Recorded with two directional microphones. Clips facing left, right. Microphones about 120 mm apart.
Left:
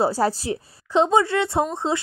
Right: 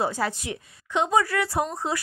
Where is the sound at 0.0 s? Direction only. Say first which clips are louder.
Left 6 dB; 35° left (ahead or behind).